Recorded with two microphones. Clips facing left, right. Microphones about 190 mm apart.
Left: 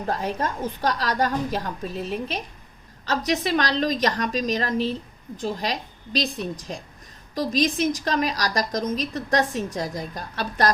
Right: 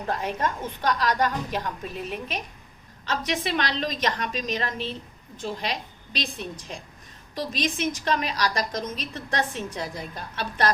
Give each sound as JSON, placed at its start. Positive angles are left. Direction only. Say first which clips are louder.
{"t": 0.1, "sound": "a woman's voice", "louder": "left 1 dB", "side_deg": 35}